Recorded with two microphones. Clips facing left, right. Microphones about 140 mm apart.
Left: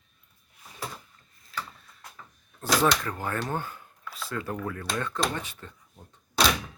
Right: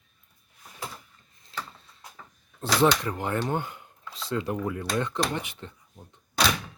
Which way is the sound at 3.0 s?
20° right (ahead or behind).